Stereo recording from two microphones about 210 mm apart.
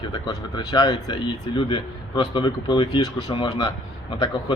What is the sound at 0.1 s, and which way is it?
Speech, 20° left (ahead or behind).